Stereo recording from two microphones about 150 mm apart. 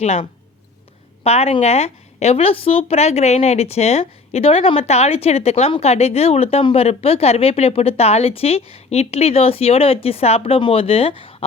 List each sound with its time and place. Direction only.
0.0 s a woman's voice: 45° left (ahead or behind)